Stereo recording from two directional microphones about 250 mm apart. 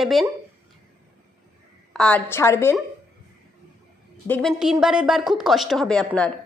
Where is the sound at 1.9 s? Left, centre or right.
Centre.